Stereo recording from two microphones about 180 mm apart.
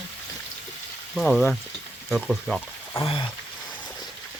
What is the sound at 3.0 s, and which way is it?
Rain, 30° left (ahead or behind).